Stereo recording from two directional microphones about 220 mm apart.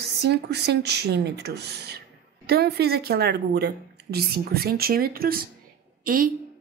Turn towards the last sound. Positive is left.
turn(degrees=-40)  # may be behind; listen again after turning